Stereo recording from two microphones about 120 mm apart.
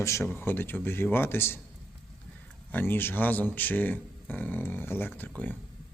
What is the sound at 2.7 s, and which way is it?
Speech, 20° left (ahead or behind).